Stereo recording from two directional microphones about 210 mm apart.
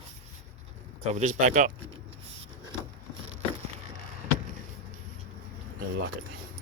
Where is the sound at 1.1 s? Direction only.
35° right (ahead or behind).